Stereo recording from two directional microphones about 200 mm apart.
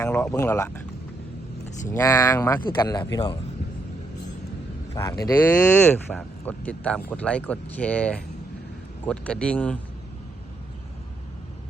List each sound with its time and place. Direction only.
0.0 s speech: 10° left (ahead or behind)
1.9 s speech: 15° left (ahead or behind)
4.9 s speech: 15° left (ahead or behind)